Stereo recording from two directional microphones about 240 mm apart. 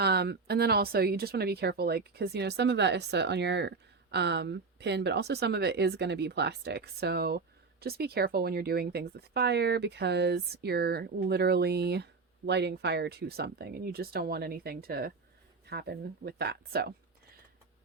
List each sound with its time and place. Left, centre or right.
0.0 s speech: right